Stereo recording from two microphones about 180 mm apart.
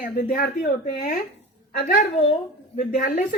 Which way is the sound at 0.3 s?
55° left (ahead or behind).